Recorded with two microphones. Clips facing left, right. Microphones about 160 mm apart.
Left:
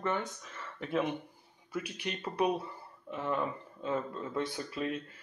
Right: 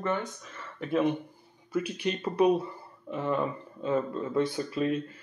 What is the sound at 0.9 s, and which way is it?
Speech, 20° right (ahead or behind).